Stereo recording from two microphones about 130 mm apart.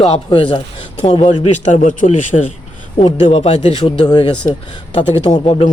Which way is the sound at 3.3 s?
60° left (ahead or behind).